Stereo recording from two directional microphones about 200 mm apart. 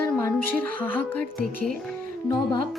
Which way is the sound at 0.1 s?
10° left (ahead or behind).